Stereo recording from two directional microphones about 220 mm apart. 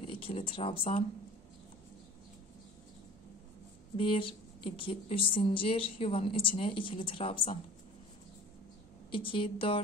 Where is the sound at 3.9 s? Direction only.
25° left (ahead or behind).